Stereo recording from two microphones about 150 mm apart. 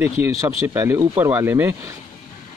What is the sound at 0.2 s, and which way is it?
Speech, 20° right (ahead or behind).